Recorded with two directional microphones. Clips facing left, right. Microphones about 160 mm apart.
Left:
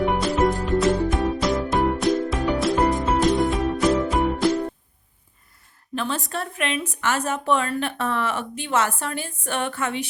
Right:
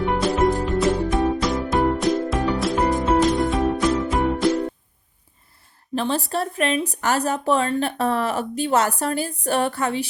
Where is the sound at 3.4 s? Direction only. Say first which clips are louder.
Right 1 dB; centre (ahead or behind).